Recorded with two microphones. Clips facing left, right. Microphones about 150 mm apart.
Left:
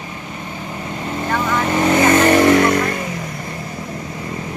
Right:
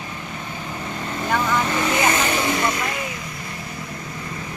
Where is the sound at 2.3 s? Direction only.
70° left (ahead or behind).